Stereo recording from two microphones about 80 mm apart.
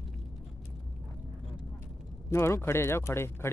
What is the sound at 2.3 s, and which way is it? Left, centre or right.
Speech, left.